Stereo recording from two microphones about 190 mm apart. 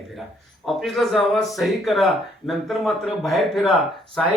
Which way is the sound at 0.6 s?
Centre (ahead or behind).